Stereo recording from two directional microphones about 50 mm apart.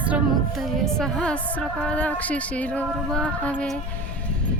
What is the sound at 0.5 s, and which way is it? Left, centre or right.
Speech, centre.